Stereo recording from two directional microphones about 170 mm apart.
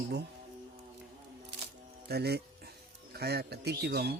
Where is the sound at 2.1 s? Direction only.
70° right (ahead or behind).